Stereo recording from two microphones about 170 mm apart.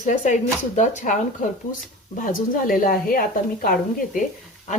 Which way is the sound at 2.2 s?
55° left (ahead or behind).